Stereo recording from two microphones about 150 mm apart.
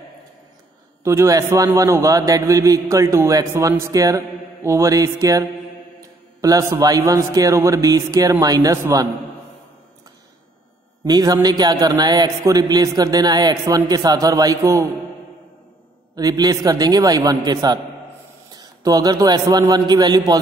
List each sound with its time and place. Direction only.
1.0 s a man's voice: 20° right (ahead or behind)
6.4 s a man's voice: 25° right (ahead or behind)
11.1 s a man's voice: 25° right (ahead or behind)
16.2 s a man's voice: 25° right (ahead or behind)